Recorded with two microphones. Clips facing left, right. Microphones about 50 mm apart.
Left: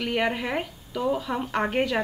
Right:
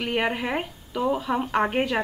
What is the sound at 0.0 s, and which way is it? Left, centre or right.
A woman's voice, centre.